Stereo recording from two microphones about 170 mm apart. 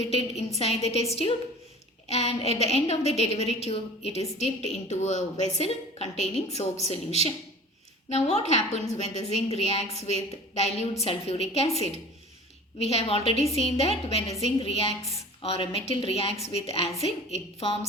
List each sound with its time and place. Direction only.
0.1 s a woman's voice: 40° left (ahead or behind)